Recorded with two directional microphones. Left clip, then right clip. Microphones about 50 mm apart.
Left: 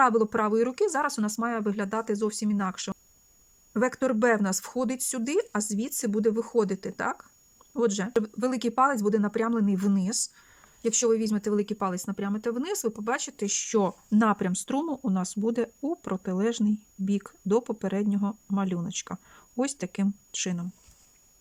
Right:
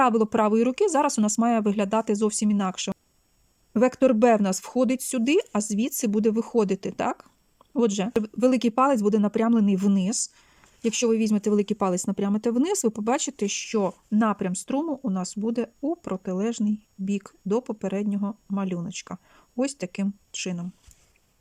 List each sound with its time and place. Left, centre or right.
0.1 s speech: right
3.7 s speech: right
8.2 s speech: right
12.9 s speech: right
13.7 s speech: centre